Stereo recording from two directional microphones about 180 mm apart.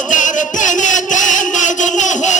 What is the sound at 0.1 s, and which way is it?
Music, 45° left (ahead or behind).